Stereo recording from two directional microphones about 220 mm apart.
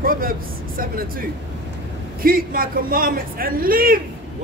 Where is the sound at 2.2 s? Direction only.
40° right (ahead or behind).